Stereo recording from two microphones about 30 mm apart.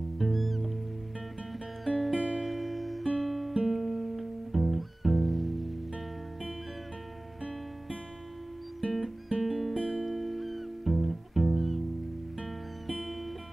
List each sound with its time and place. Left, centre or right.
0.2 s music: centre
1.9 s music: centre
9.4 s music: centre